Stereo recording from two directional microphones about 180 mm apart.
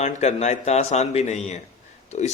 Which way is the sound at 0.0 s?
40° left (ahead or behind).